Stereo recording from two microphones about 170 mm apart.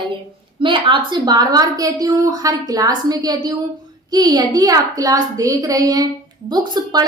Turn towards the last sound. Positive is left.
turn(degrees=-25)  # may be behind; listen again after turning